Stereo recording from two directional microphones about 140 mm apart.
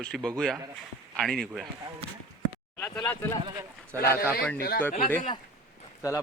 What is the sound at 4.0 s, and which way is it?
Speech, 90° left.